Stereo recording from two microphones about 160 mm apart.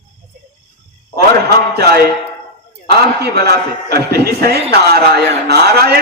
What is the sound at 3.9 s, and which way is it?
A man's voice, 80° right.